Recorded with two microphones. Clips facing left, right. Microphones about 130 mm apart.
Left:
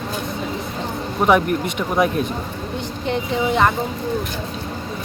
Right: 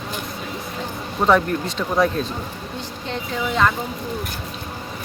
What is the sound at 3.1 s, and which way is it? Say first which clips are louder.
Speech: left 4 dB; 20° left (ahead or behind).